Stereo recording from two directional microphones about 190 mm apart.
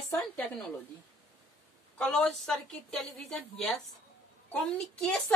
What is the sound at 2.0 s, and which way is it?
A woman's voice, 5° left (ahead or behind).